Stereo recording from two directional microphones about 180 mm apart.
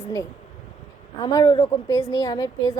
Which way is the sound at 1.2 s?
20° left (ahead or behind).